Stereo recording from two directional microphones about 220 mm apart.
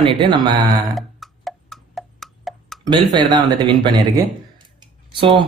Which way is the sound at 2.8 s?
20° right (ahead or behind).